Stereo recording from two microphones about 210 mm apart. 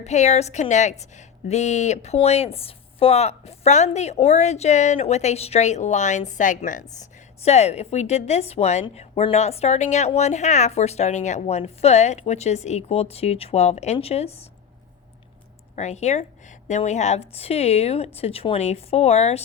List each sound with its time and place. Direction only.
0.0 s speech: 35° left (ahead or behind)
15.7 s a woman's voice: 35° left (ahead or behind)